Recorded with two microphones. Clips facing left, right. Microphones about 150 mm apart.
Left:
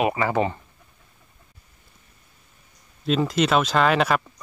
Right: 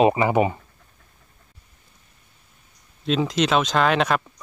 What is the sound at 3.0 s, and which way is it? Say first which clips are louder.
Speech: even; centre (ahead or behind).